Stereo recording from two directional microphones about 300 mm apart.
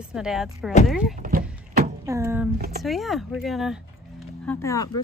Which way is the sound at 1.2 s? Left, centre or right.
Right.